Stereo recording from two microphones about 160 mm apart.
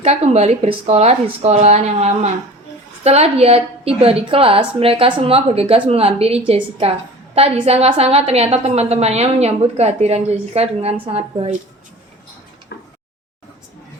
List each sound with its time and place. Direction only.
0.0 s a woman's voice: 40° right (ahead or behind)